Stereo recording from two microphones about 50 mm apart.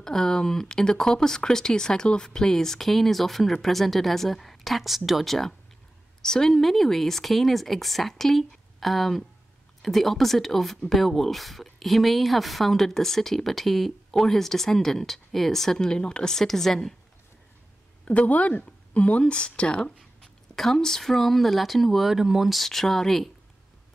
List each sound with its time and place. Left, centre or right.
0.0 s speech: centre
18.0 s speech: left
20.0 s speech: centre